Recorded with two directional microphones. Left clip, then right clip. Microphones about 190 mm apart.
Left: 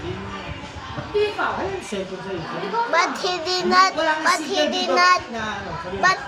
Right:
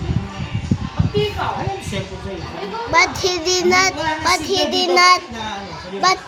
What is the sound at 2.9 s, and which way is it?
Child singing, 35° right (ahead or behind).